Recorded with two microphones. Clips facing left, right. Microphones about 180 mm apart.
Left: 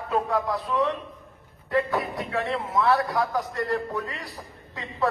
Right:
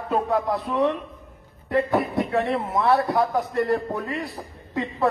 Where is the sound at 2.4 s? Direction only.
55° right (ahead or behind).